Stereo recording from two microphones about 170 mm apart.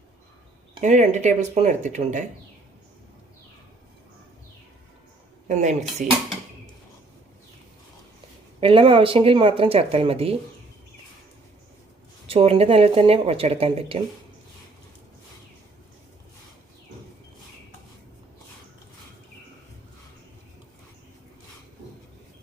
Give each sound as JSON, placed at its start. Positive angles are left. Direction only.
{"t": 0.8, "sound": "speech", "side_deg": -45}
{"t": 5.5, "sound": "speech", "side_deg": -45}
{"t": 8.6, "sound": "speech", "side_deg": -30}
{"t": 12.3, "sound": "speech", "side_deg": -35}